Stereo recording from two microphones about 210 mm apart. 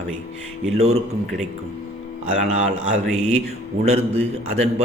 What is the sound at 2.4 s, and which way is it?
Speech, 30° right (ahead or behind).